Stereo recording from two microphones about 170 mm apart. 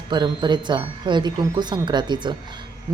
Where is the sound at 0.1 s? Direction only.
25° right (ahead or behind).